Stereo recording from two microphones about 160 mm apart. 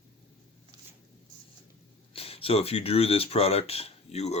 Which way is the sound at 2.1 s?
35° left (ahead or behind).